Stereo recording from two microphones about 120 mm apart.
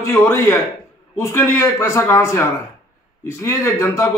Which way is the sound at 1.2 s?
25° left (ahead or behind).